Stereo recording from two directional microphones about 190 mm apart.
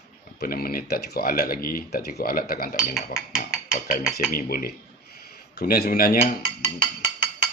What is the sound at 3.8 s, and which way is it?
Speech, 45° left (ahead or behind).